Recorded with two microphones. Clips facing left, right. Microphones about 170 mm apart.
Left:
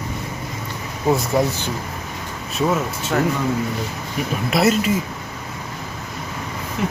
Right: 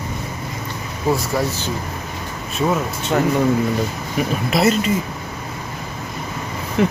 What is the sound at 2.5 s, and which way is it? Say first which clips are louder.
Speech: even; centre (ahead or behind).